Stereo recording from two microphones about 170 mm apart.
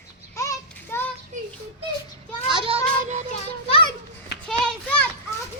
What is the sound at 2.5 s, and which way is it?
Child singing, 30° right (ahead or behind).